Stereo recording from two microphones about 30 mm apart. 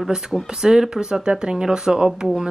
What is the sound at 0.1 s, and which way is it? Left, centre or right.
Speech, right.